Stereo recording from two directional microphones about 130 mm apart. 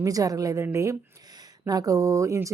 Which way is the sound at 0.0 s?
25° right (ahead or behind).